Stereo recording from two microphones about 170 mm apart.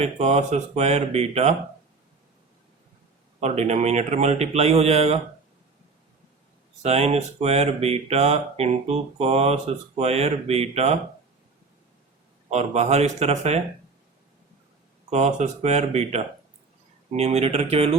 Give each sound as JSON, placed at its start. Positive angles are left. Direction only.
{"t": 0.0, "sound": "speech", "side_deg": -40}
{"t": 3.4, "sound": "speech", "side_deg": -40}
{"t": 6.8, "sound": "speech", "side_deg": -40}
{"t": 12.5, "sound": "speech", "side_deg": -40}
{"t": 15.1, "sound": "speech", "side_deg": -40}